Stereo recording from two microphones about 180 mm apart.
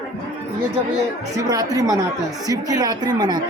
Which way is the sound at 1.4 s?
20° right (ahead or behind).